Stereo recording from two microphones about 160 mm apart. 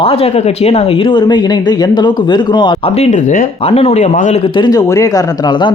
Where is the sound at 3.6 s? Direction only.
40° left (ahead or behind).